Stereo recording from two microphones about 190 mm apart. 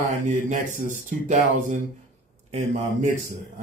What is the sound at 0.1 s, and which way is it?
A man's voice, 45° right (ahead or behind).